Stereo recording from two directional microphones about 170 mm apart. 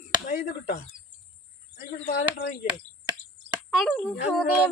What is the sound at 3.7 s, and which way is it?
Speech, 5° left (ahead or behind).